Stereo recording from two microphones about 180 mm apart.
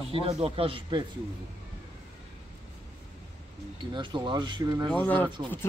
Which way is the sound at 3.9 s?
25° right (ahead or behind).